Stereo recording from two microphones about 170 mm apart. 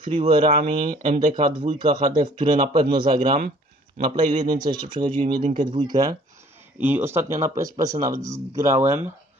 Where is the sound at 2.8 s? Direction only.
30° right (ahead or behind).